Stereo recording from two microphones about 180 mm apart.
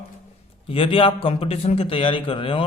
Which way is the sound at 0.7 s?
30° left (ahead or behind).